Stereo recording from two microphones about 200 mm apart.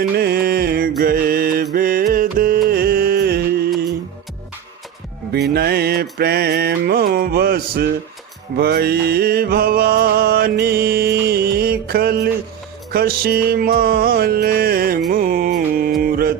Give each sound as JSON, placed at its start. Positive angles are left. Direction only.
{"t": 0.2, "sound": "mantra", "side_deg": -50}
{"t": 1.7, "sound": "music", "side_deg": -45}
{"t": 5.3, "sound": "music", "side_deg": -55}
{"t": 16.0, "sound": "mantra", "side_deg": -50}